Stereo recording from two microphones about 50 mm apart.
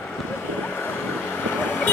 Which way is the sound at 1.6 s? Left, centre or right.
Left.